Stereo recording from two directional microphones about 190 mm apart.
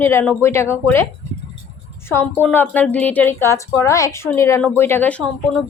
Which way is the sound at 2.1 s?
10° left (ahead or behind).